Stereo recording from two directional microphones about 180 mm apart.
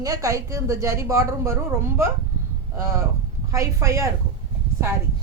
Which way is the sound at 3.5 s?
15° right (ahead or behind).